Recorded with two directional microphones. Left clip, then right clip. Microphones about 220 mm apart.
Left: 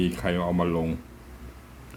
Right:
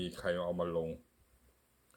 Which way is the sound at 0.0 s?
20° right (ahead or behind).